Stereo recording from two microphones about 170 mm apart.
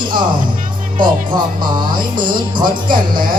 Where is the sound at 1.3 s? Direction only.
25° right (ahead or behind).